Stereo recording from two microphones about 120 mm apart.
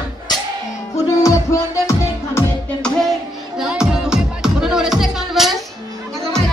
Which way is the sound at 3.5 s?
5° right (ahead or behind).